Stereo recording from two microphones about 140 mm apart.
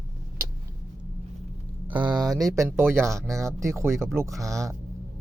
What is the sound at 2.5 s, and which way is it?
Speech, 20° right (ahead or behind).